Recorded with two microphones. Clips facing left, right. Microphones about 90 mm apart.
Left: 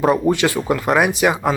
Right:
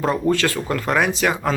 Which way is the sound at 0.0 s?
15° left (ahead or behind).